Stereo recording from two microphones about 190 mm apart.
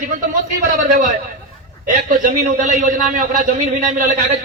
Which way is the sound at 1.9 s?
40° right (ahead or behind).